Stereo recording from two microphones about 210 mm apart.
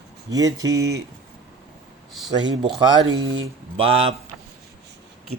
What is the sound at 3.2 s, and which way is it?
Speech, 70° right (ahead or behind).